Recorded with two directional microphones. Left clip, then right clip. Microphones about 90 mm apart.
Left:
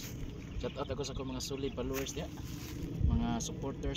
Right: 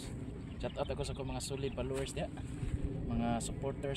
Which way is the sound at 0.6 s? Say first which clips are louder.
Even; 45° right (ahead or behind).